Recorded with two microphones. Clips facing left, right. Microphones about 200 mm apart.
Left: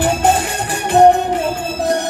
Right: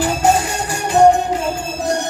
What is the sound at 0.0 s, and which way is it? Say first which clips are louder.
Music: left 1 dB; 55° left (ahead or behind).